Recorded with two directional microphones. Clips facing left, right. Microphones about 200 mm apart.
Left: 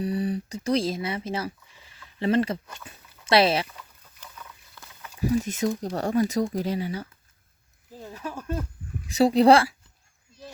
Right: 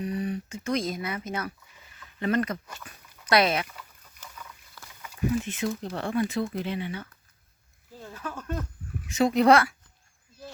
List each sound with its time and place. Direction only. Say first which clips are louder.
0.0 s speech: left 3 dB; 35° left (ahead or behind)
4.0 s a sound: even; 10° left (ahead or behind)
4.7 s a sound: even; 5° right (ahead or behind)
5.2 s speech: left 3 dB; 35° left (ahead or behind)
8.0 s speech: left 2 dB; 10° left (ahead or behind)
9.0 s speech: left 3 dB; 35° left (ahead or behind)